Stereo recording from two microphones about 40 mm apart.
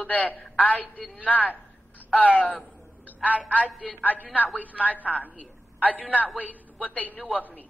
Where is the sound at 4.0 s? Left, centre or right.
Left.